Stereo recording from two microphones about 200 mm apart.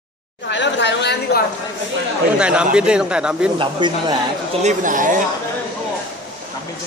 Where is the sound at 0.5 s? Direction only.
65° left (ahead or behind).